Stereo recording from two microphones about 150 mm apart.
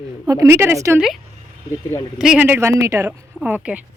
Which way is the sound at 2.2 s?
10° right (ahead or behind).